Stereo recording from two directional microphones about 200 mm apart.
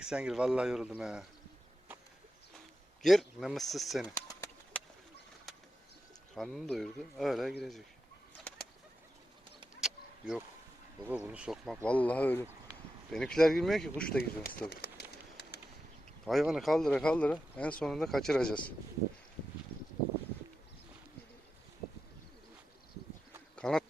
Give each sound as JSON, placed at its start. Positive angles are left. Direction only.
{"t": 0.0, "sound": "speech", "side_deg": -5}
{"t": 3.0, "sound": "speech", "side_deg": 0}
{"t": 4.0, "sound": "pigeon", "side_deg": 20}
{"t": 4.7, "sound": "bird", "side_deg": 5}
{"t": 6.3, "sound": "speech", "side_deg": 0}
{"t": 9.8, "sound": "vehicle", "side_deg": -5}
{"t": 11.1, "sound": "speech", "side_deg": -5}
{"t": 14.2, "sound": "speech", "side_deg": 45}
{"t": 14.7, "sound": "pigeon", "side_deg": 50}
{"t": 15.1, "sound": "bird", "side_deg": 55}
{"t": 16.2, "sound": "speech", "side_deg": 0}
{"t": 23.6, "sound": "a sound", "side_deg": 0}